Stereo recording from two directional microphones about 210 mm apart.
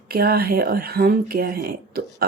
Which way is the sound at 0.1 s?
45° right (ahead or behind).